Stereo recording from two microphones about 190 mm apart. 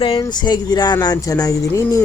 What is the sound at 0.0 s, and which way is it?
Speech, 25° left (ahead or behind).